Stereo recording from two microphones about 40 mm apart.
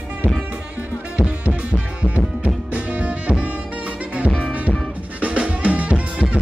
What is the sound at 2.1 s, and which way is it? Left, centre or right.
Music, right.